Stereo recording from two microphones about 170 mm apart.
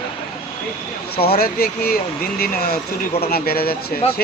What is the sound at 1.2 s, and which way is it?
Speech, 65° left (ahead or behind).